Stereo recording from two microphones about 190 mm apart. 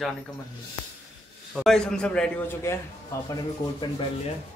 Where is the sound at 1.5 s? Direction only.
Centre (ahead or behind); by 3.3 s 15° left (ahead or behind).